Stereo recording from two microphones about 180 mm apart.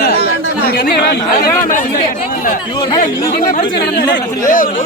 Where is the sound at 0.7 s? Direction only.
60° left (ahead or behind).